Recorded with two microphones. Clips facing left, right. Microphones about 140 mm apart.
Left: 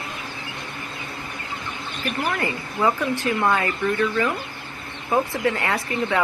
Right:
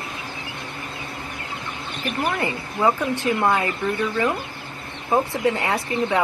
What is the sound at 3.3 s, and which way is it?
Speech, 20° right (ahead or behind).